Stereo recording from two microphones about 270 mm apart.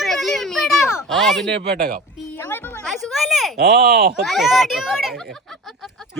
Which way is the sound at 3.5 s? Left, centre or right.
Right.